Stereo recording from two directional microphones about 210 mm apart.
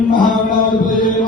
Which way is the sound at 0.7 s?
Centre (ahead or behind).